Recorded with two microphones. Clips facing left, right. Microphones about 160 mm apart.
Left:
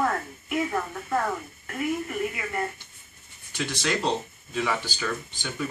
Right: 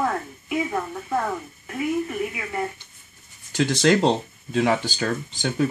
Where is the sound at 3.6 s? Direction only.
80° right.